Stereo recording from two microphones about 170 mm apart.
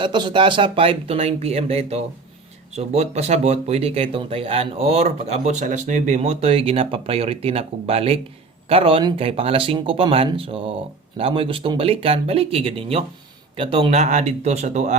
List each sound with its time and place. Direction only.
0.0 s speech: 25° right (ahead or behind); by 14.9 s 45° right (ahead or behind)